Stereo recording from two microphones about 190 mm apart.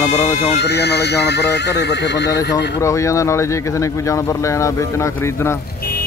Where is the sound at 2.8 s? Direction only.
15° left (ahead or behind).